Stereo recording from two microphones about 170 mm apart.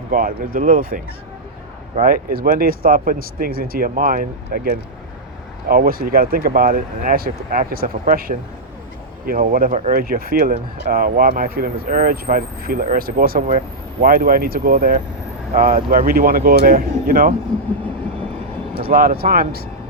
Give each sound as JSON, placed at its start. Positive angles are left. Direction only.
{"t": 0.1, "sound": "speech", "side_deg": -55}
{"t": 18.8, "sound": "speech", "side_deg": -60}